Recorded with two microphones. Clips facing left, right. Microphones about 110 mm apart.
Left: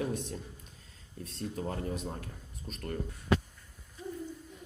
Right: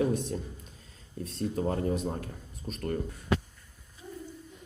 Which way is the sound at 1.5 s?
55° right (ahead or behind).